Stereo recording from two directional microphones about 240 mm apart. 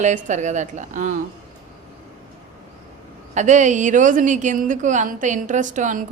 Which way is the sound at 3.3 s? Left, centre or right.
Right.